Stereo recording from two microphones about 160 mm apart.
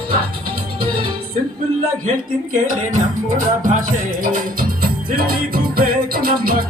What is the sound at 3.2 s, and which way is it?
Music, 55° right (ahead or behind).